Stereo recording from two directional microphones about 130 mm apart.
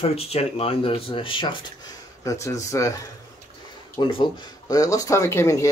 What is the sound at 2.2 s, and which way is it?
Speech, 25° left (ahead or behind).